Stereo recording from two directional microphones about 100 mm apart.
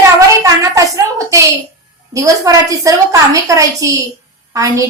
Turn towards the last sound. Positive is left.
turn(degrees=-35)  # may be behind; listen again after turning